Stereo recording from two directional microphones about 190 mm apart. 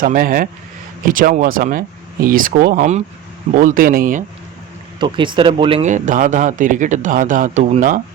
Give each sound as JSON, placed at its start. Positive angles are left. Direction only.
{"t": 0.0, "sound": "speech", "side_deg": -50}
{"t": 4.9, "sound": "speech", "side_deg": -25}
{"t": 5.9, "sound": "speech", "side_deg": -40}